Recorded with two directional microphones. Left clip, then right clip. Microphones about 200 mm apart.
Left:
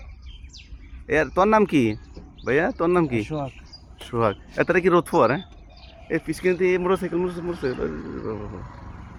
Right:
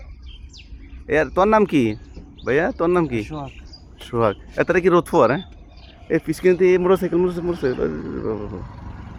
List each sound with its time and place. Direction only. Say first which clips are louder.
1.0 s speech: right 2 dB; centre (ahead or behind); by 8.6 s 20° right (ahead or behind)